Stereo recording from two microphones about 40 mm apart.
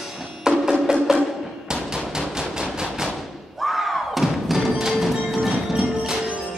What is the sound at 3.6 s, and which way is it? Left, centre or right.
Music, centre.